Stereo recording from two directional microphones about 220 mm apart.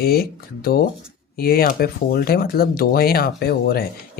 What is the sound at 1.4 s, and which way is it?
Speech, 45° left (ahead or behind).